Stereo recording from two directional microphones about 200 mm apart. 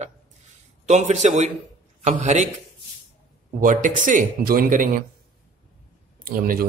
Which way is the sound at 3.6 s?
40° right (ahead or behind).